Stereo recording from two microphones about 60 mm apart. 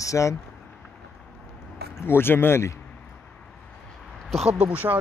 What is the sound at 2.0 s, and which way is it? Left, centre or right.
Speech, left.